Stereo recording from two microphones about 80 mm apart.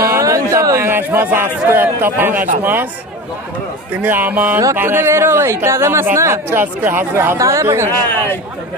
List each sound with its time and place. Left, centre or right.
0.0 s a sound: right
0.9 s a man's voice: right
4.0 s a man's voice: right
7.3 s speech: right